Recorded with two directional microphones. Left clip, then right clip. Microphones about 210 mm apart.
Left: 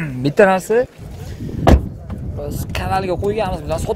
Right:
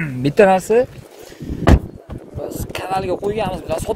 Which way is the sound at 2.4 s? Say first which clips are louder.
Left 1 dB; centre (ahead or behind).